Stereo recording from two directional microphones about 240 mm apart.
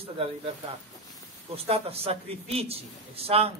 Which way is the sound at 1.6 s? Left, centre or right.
Right.